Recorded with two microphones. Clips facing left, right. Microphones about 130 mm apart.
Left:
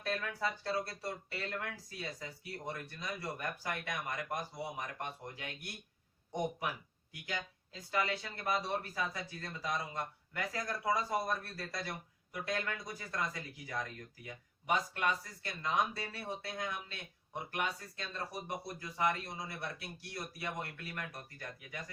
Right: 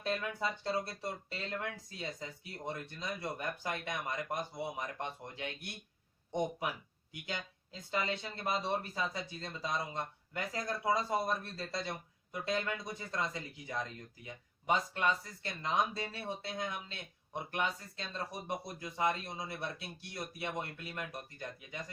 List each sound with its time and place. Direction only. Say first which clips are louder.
0.0 s speech: right 1 dB; 20° right (ahead or behind)
7.1 s speech: even; 25° right (ahead or behind)